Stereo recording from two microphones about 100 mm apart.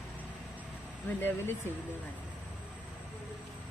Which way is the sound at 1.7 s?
25° left (ahead or behind).